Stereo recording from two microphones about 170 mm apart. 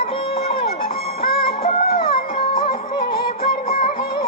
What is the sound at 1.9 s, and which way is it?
Music, 60° left (ahead or behind).